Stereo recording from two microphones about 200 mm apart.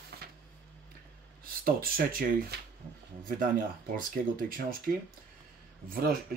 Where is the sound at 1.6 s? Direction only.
45° right (ahead or behind).